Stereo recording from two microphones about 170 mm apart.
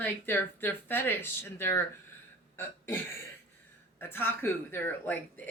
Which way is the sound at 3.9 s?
10° left (ahead or behind).